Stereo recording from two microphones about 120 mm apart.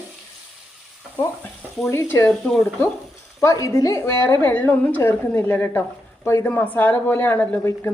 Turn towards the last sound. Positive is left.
turn(degrees=20)  # may be behind; listen again after turning